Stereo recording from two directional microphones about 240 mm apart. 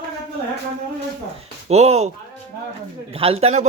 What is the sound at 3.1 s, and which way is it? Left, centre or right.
Speech, right.